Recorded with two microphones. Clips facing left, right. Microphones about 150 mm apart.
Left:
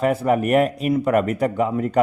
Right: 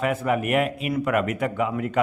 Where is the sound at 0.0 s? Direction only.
40° left (ahead or behind).